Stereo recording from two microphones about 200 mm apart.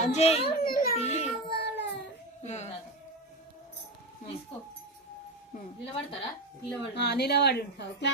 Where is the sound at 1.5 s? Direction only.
55° left (ahead or behind).